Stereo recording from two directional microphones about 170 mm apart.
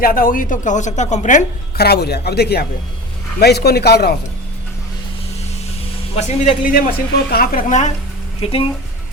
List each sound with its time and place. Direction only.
0.0 s speech: 55° left (ahead or behind)
1.7 s a man's voice: 70° left (ahead or behind)
6.1 s speech: 40° left (ahead or behind); by 7.6 s 60° left (ahead or behind)
7.7 s speech: 45° left (ahead or behind)